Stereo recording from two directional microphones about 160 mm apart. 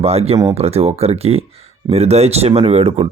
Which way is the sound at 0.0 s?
40° right (ahead or behind).